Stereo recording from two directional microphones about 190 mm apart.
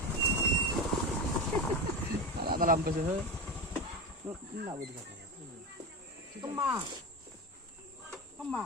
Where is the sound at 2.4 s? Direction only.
50° right (ahead or behind).